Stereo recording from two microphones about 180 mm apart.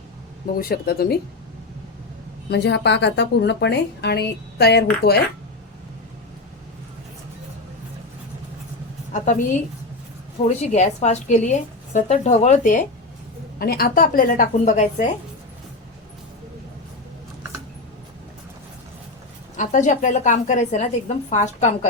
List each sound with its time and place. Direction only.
0.6 s speech: 60° left (ahead or behind)
2.5 s a woman's voice: 70° left (ahead or behind)
10.4 s a woman's voice: 40° left (ahead or behind)
13.6 s a woman's voice: 55° left (ahead or behind)
19.5 s a woman's voice: 45° left (ahead or behind)